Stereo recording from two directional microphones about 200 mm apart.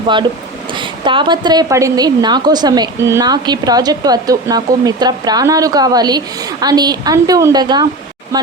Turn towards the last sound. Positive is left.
turn(degrees=-20)  # may be behind; listen again after turning